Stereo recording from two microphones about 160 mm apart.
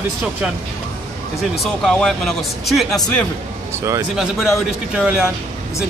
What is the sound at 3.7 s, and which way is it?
Speech, 20° right (ahead or behind).